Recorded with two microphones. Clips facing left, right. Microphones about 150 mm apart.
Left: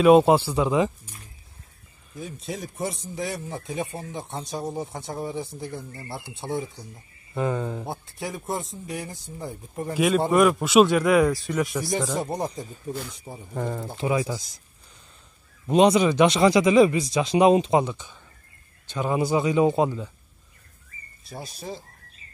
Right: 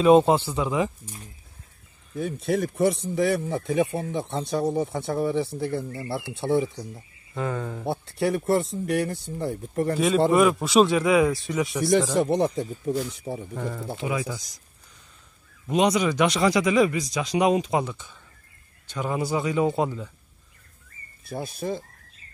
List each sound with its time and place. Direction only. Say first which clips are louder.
0.0 s speech: left 1 dB; 10° left (ahead or behind)
0.7 s speech: left 2 dB; 20° left (ahead or behind)
2.1 s speech: right 9 dB; 60° right (ahead or behind)
7.3 s speech: left 3 dB; 15° left (ahead or behind)
7.8 s speech: right 7 dB; 65° right (ahead or behind)
9.9 s a man's voice: even; 5° left (ahead or behind)
12.1 s speech: right 6 dB; 90° right
14.0 s speech: left 4 dB; 30° left (ahead or behind)
15.6 s speech: left 4 dB; 30° left (ahead or behind)
21.2 s speech: right 7 dB; 55° right (ahead or behind)